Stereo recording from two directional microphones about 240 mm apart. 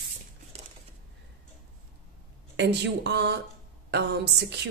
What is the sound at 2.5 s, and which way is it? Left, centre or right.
A woman's voice, right.